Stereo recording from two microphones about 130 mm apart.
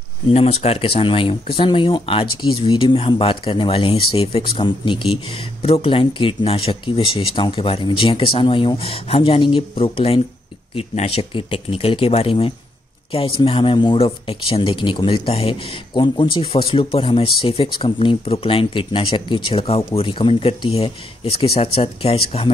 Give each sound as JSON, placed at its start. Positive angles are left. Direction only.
{"t": 0.3, "sound": "speech", "side_deg": 50}
{"t": 15.9, "sound": "speech", "side_deg": 40}